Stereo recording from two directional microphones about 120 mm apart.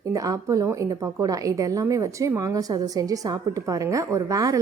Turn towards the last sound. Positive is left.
turn(degrees=-30)  # may be behind; listen again after turning